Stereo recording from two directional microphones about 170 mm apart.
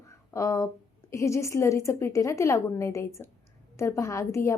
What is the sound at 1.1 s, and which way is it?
A woman's voice, 15° left (ahead or behind).